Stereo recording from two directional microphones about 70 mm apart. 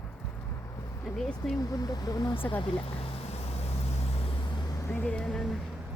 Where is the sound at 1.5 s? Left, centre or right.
Left.